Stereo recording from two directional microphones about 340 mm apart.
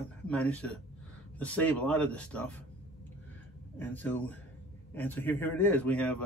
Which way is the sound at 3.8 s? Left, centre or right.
Centre.